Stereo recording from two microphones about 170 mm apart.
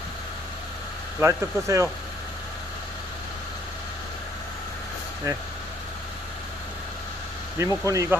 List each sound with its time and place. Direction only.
1.2 s speech: 15° right (ahead or behind)
7.6 s speech: 20° right (ahead or behind)